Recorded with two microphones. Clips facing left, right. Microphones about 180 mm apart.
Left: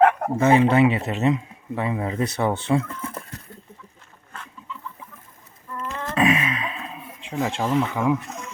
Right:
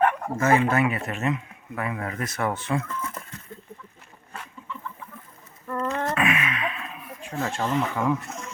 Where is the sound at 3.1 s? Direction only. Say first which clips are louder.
Left 3 dB; 40° left (ahead or behind).